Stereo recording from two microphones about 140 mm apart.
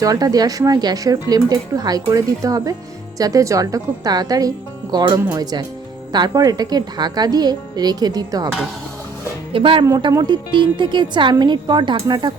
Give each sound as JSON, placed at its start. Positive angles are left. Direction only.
{"t": 0.0, "sound": "speech", "side_deg": -25}
{"t": 9.5, "sound": "speech", "side_deg": -40}